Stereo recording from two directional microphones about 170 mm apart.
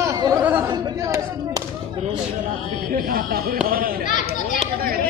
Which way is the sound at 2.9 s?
60° right (ahead or behind).